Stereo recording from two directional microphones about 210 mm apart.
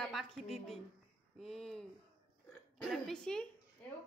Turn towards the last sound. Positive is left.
turn(degrees=5)  # may be behind; listen again after turning